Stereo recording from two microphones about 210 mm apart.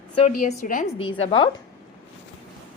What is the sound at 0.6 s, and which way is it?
Speech, 40° left (ahead or behind).